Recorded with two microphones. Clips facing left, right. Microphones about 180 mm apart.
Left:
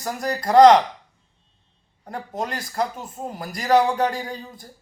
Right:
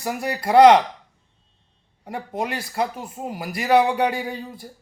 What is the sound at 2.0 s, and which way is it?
Speech, 10° right (ahead or behind).